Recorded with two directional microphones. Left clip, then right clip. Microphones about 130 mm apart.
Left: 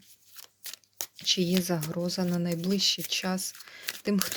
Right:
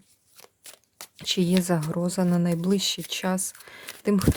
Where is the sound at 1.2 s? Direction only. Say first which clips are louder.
Right 2 dB; 45° right (ahead or behind).